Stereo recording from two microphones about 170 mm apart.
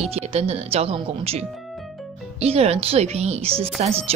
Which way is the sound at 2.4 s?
35° right (ahead or behind).